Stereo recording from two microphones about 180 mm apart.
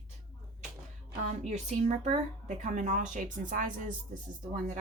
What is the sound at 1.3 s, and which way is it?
Speech, 40° right (ahead or behind).